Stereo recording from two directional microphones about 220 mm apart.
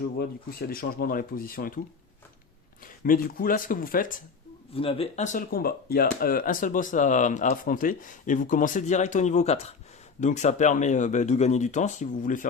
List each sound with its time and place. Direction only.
0.7 s speech: 40° left (ahead or behind)
2.8 s speech: 40° left (ahead or behind)
4.7 s speech: 25° left (ahead or behind)